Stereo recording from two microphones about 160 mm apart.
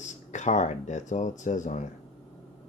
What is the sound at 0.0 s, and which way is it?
Speech, 50° left (ahead or behind).